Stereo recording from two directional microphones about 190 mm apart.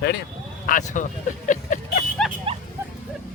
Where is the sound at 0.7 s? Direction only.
40° left (ahead or behind).